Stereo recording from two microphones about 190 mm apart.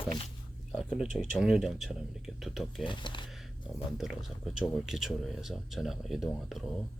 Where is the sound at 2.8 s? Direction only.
25° left (ahead or behind).